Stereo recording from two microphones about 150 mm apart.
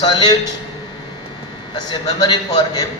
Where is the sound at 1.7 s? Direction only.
30° left (ahead or behind).